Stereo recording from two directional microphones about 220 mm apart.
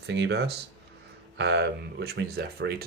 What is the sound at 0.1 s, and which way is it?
Speech, 50° right (ahead or behind).